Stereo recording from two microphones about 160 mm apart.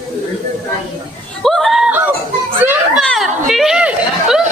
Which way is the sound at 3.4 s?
Centre (ahead or behind).